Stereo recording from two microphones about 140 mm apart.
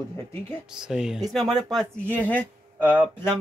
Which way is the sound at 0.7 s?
5° right (ahead or behind).